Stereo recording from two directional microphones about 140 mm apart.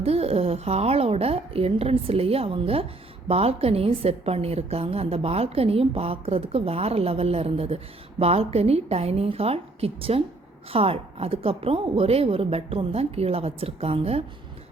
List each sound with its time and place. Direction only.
0.0 s a woman's voice: 45° right (ahead or behind)